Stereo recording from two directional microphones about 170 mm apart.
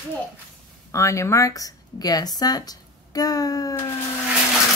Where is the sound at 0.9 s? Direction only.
15° left (ahead or behind).